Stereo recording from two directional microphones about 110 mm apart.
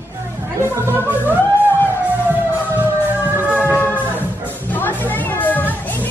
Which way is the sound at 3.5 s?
15° right (ahead or behind).